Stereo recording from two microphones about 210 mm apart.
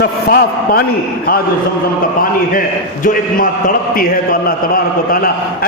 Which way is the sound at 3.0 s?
40° left (ahead or behind).